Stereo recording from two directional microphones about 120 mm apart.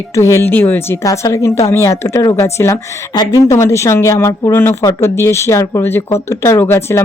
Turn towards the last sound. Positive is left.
turn(degrees=20)  # may be behind; listen again after turning